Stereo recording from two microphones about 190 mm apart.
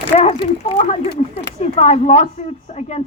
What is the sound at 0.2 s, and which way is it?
A woman's voice, 35° left (ahead or behind).